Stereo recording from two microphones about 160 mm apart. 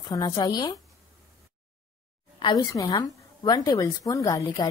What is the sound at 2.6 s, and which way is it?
Speech, 20° left (ahead or behind).